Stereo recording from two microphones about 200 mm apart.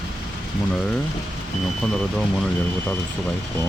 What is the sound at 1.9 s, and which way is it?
Speech, centre (ahead or behind).